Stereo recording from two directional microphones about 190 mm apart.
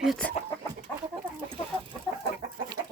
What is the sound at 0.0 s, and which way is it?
Speech, centre (ahead or behind).